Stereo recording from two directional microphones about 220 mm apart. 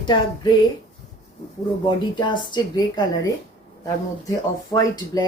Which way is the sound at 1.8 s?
20° left (ahead or behind).